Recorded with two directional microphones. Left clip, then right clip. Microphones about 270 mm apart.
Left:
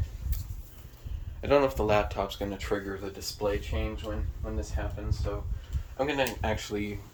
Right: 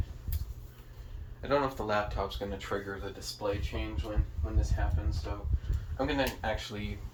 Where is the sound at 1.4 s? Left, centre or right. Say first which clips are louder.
Left 6 dB; left.